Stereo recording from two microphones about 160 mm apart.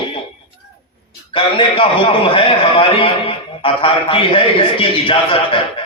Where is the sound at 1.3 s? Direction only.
35° left (ahead or behind).